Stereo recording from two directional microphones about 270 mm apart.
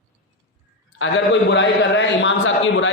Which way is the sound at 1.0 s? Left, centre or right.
Left.